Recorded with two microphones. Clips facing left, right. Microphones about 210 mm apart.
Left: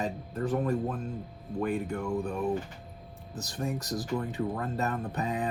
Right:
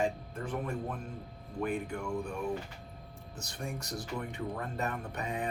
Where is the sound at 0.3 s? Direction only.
35° left (ahead or behind).